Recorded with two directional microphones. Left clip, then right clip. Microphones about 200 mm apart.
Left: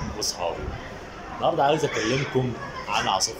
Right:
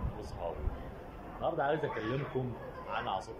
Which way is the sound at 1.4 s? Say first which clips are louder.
Left 11 dB; 5° left (ahead or behind).